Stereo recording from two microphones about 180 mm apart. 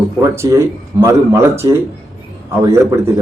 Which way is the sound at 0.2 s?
15° right (ahead or behind).